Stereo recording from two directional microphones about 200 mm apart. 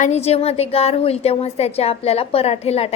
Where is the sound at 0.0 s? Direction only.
30° left (ahead or behind).